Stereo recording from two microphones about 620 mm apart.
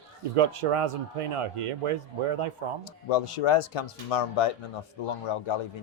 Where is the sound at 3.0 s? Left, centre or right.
Left.